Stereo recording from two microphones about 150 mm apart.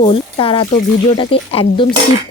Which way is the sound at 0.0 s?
35° left (ahead or behind).